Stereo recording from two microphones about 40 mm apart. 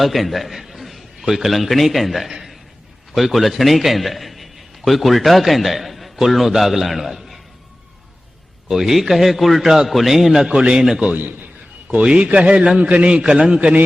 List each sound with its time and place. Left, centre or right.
0.0 s a sound: centre
1.3 s a man's voice: centre
8.6 s a man's voice: centre
11.9 s a man's voice: right